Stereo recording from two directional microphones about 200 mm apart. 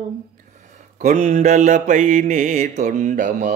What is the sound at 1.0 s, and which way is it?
Mantra, 40° right (ahead or behind).